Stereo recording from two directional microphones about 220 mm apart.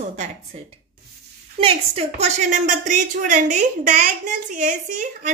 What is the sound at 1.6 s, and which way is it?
A woman's voice, 25° right (ahead or behind).